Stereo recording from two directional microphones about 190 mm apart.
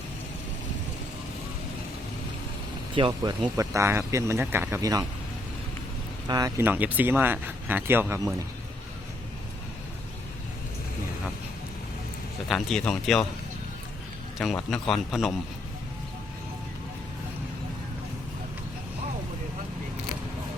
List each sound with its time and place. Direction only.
2.9 s speech: 25° right (ahead or behind)
6.2 s speech: 20° right (ahead or behind)
12.5 s a man's voice: centre (ahead or behind)
14.3 s a man's voice: centre (ahead or behind)